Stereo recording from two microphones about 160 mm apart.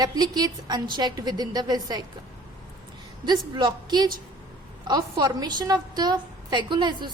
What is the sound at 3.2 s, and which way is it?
A woman's voice, 25° right (ahead or behind).